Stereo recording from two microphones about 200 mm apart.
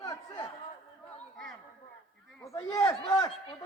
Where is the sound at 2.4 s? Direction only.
15° left (ahead or behind).